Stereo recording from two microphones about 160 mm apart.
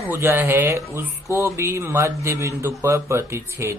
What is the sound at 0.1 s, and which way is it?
Speech, 15° right (ahead or behind).